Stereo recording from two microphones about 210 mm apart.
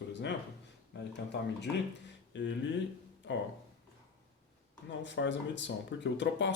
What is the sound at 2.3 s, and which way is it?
Speech, 60° left (ahead or behind).